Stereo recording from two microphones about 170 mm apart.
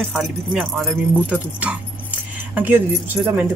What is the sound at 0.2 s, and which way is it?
Speech, centre (ahead or behind).